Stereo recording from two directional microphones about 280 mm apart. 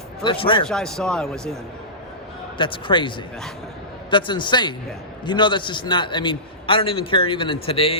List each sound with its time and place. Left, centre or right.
0.2 s a man's voice: centre
0.7 s speech: centre
2.6 s a man's voice: centre
4.1 s a man's voice: centre